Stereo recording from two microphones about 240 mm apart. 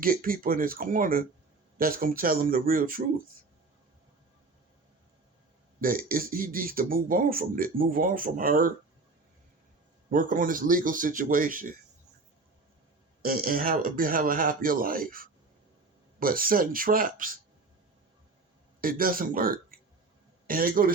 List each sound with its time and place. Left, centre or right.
0.0 s speech: right
5.8 s speech: right
10.1 s speech: right
13.2 s speech: right
18.8 s speech: right